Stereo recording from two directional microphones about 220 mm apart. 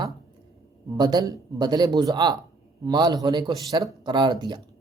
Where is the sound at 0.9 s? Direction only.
20° right (ahead or behind).